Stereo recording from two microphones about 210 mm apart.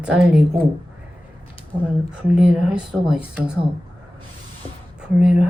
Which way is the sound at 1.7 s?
20° right (ahead or behind).